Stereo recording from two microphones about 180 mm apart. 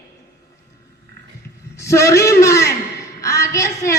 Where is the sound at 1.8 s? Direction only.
15° left (ahead or behind).